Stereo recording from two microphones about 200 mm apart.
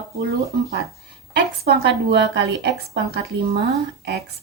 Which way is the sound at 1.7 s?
55° right (ahead or behind).